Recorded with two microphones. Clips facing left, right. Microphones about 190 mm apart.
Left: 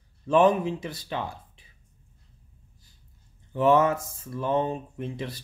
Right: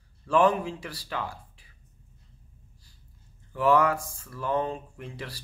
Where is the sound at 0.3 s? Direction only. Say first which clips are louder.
Left 3 dB; 20° left (ahead or behind).